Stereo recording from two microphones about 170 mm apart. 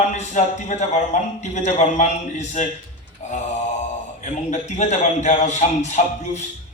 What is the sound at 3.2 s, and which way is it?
Mantra, 45° left (ahead or behind).